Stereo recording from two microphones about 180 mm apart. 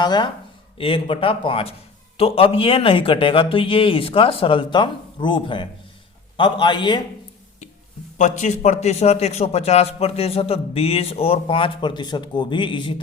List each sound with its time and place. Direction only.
0.0 s a man's voice: 25° left (ahead or behind)
8.2 s a man's voice: 40° left (ahead or behind); by 13.0 s 25° left (ahead or behind)